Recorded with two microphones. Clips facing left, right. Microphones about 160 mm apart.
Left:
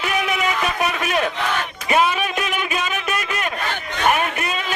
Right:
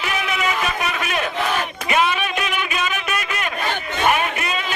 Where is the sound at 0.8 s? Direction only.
35° left (ahead or behind).